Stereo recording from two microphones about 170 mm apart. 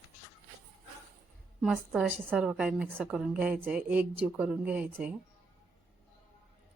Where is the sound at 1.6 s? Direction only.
5° right (ahead or behind).